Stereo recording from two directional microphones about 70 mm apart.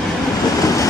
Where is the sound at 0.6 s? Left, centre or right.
Left.